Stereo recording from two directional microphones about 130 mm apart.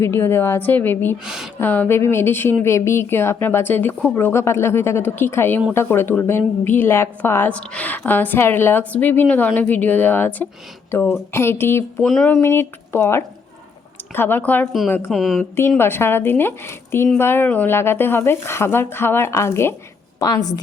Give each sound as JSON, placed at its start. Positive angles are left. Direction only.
{"t": 0.0, "sound": "a woman's voice", "side_deg": 20}
{"t": 1.2, "sound": "a woman's voice", "side_deg": -5}
{"t": 1.5, "sound": "a woman's voice", "side_deg": 15}
{"t": 12.0, "sound": "a woman's voice", "side_deg": 0}
{"t": 12.4, "sound": "a woman's voice", "side_deg": 20}
{"t": 15.1, "sound": "a woman's voice", "side_deg": 0}
{"t": 15.8, "sound": "a woman's voice", "side_deg": 20}